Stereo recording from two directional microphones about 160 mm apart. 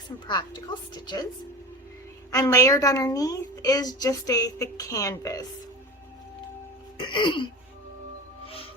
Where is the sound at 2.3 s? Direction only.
20° left (ahead or behind).